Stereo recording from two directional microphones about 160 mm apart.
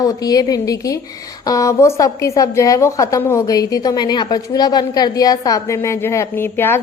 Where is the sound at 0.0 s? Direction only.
25° left (ahead or behind).